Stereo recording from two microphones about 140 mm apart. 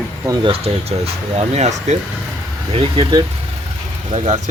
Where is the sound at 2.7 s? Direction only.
40° right (ahead or behind).